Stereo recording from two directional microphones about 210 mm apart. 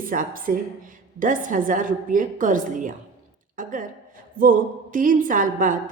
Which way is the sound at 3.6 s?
40° right (ahead or behind).